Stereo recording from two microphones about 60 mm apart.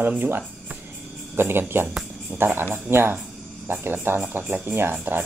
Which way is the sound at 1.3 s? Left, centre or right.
Right.